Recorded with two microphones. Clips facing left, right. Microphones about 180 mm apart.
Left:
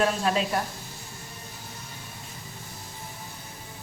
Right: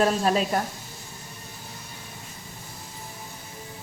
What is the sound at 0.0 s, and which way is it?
Speech, 40° right (ahead or behind).